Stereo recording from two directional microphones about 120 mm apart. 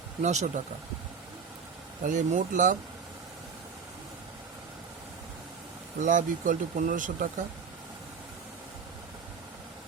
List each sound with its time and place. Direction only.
0.2 s speech: 75° right (ahead or behind)
2.0 s speech: 90° right
6.0 s speech: 90° right